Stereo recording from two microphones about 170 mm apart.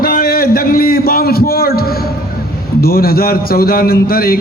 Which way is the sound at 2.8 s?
60° left (ahead or behind).